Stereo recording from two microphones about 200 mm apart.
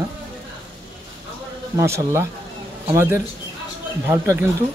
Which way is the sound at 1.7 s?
15° right (ahead or behind).